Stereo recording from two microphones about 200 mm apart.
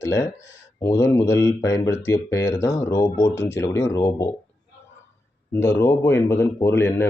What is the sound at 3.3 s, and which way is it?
Speech, 65° left (ahead or behind).